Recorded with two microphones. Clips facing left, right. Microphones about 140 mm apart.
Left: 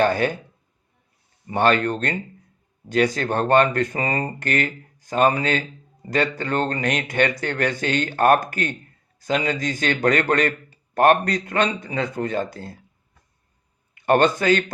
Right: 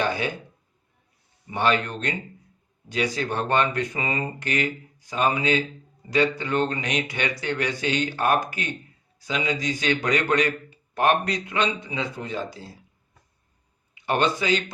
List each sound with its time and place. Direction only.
0.0 s a man's voice: 50° left (ahead or behind)
1.5 s a man's voice: 45° left (ahead or behind)
13.9 s speech: 50° left (ahead or behind)